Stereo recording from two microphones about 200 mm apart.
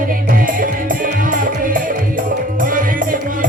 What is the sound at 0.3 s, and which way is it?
Music, 45° right (ahead or behind).